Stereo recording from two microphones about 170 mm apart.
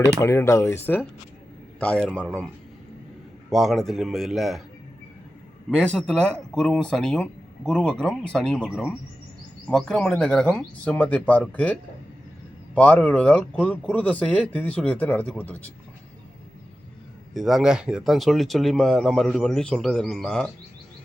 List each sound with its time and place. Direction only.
0.2 s speech: 15° left (ahead or behind)
1.8 s speech: 10° left (ahead or behind)
3.5 s speech: centre (ahead or behind)
5.7 s speech: 5° left (ahead or behind)
12.7 s speech: 10° left (ahead or behind)
17.3 s speech: centre (ahead or behind)